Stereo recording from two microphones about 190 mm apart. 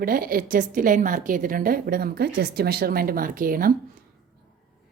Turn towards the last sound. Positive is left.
turn(degrees=-50)  # may be behind; listen again after turning